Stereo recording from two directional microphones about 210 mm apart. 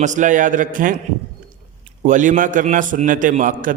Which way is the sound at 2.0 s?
35° right (ahead or behind).